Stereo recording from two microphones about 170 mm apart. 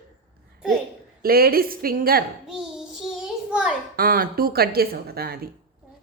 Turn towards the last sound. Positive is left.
turn(degrees=-65)  # may be behind; listen again after turning